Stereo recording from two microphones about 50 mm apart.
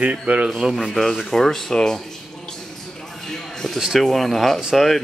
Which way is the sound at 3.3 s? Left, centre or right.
Centre.